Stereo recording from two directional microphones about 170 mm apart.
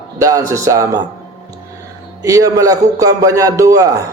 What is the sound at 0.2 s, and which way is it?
Speech, 20° right (ahead or behind).